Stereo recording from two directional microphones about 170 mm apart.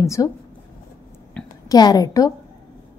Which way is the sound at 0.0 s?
20° left (ahead or behind).